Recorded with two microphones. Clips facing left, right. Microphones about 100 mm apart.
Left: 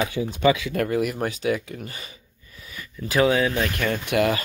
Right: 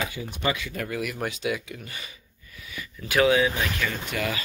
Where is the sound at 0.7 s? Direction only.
40° left (ahead or behind).